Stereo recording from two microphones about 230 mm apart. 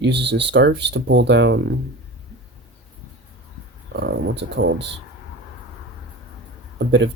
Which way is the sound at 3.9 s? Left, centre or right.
Right.